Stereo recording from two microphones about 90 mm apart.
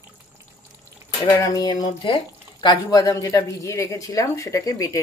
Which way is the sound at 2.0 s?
65° left (ahead or behind).